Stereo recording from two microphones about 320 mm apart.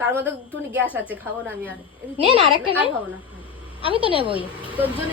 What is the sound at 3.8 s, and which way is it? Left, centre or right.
Speech, centre.